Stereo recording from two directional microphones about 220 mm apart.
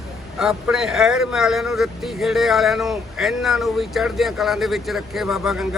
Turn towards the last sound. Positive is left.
turn(degrees=0)  # may be behind; listen again after turning